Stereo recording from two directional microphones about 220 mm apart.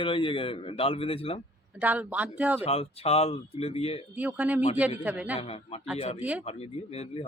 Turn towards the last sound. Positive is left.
turn(degrees=25)  # may be behind; listen again after turning